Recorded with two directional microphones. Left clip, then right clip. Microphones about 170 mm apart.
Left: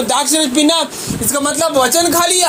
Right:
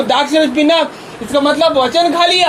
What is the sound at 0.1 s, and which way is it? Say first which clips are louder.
A man's voice: right 3 dB; 40° left (ahead or behind).